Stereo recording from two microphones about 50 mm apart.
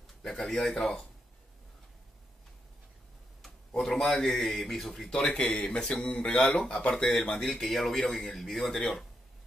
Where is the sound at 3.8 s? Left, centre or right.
Centre.